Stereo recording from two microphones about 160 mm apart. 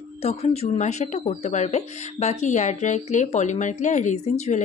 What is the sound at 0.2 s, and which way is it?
A woman's voice, 40° left (ahead or behind).